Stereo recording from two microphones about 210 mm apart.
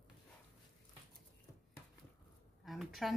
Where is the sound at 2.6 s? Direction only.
Centre (ahead or behind).